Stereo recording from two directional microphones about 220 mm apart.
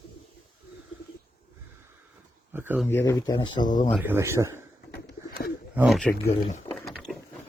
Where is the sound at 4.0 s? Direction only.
10° right (ahead or behind).